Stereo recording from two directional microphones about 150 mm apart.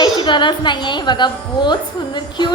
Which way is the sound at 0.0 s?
30° left (ahead or behind).